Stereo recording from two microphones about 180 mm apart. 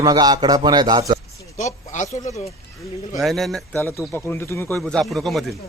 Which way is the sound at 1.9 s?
45° left (ahead or behind).